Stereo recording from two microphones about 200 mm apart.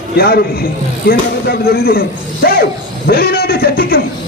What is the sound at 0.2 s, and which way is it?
A woman's voice, 50° left (ahead or behind).